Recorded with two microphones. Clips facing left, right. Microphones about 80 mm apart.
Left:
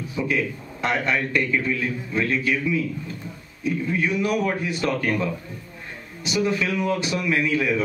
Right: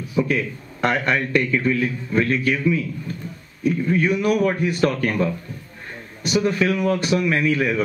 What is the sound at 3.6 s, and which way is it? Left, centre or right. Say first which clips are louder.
A man's voice: right 4 dB; right.